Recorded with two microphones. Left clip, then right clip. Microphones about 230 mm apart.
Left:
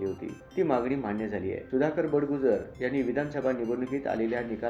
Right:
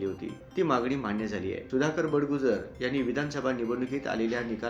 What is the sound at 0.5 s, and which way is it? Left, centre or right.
Speech, centre.